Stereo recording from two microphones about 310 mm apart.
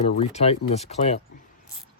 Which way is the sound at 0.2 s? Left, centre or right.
Centre.